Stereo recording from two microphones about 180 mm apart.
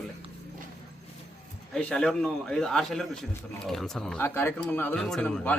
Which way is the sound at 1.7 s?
5° left (ahead or behind).